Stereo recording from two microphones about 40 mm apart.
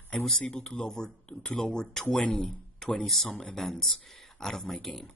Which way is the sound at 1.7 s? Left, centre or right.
Centre.